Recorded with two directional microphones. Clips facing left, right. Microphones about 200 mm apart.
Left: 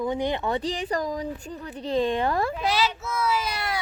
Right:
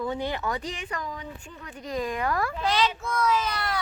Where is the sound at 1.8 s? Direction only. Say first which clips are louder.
Left 5 dB; 30° left (ahead or behind).